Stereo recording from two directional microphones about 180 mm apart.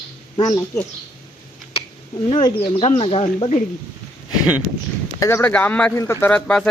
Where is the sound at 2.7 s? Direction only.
30° left (ahead or behind).